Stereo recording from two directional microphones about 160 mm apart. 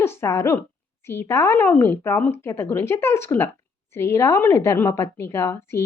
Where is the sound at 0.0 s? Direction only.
15° left (ahead or behind).